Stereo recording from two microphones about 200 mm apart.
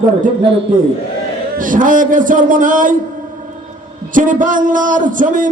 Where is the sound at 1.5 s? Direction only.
40° right (ahead or behind).